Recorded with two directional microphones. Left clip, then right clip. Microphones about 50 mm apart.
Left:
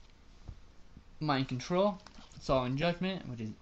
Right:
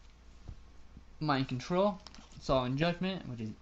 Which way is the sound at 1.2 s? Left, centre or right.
Left.